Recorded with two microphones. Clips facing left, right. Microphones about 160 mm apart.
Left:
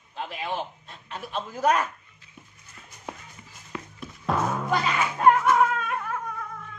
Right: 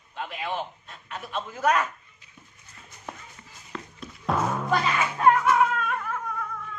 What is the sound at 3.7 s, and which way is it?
Music, 10° left (ahead or behind).